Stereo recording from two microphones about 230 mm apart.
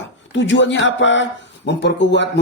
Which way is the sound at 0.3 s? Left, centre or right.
Left.